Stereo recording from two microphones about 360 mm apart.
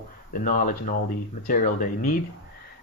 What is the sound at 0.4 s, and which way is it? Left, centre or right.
Speech, left.